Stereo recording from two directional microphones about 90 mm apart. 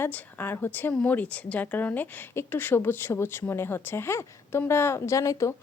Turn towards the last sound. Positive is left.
turn(degrees=35)  # may be behind; listen again after turning